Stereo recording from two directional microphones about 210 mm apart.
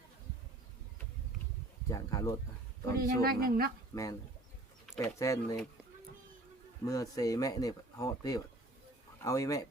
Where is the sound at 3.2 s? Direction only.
45° right (ahead or behind).